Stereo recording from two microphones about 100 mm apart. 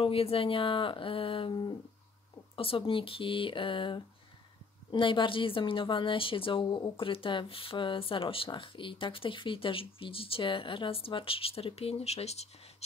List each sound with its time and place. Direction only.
0.0 s a woman's voice: 70° left (ahead or behind); by 1.8 s 55° left (ahead or behind)
2.5 s a woman's voice: 65° left (ahead or behind); by 12.4 s 90° left